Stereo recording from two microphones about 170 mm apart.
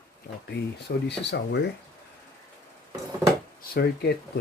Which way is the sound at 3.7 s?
70° left (ahead or behind).